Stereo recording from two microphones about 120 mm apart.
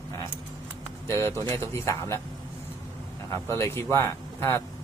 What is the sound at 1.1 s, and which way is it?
Speech, 25° left (ahead or behind).